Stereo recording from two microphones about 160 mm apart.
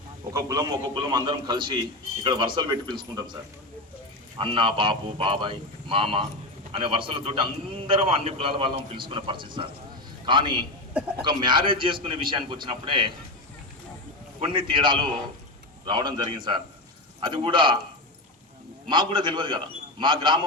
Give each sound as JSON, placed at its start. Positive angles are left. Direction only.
{"t": 0.3, "sound": "a man's voice", "side_deg": -25}
{"t": 4.4, "sound": "a man's voice", "side_deg": -35}
{"t": 14.4, "sound": "a man's voice", "side_deg": -30}
{"t": 18.9, "sound": "a man's voice", "side_deg": -30}